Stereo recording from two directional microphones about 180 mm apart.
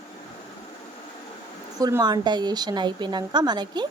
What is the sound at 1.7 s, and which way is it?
A woman's voice, 20° right (ahead or behind).